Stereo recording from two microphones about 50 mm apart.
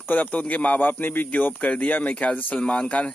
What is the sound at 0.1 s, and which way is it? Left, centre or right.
Speech, left.